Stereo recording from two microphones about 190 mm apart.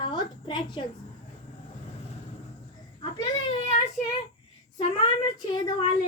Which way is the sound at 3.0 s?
25° left (ahead or behind).